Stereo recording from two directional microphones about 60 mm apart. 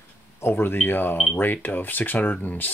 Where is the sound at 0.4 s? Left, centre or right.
Left.